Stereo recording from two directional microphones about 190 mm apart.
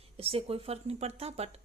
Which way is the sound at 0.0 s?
30° right (ahead or behind).